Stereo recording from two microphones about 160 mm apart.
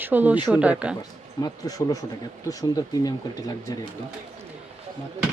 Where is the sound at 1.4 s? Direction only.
25° left (ahead or behind).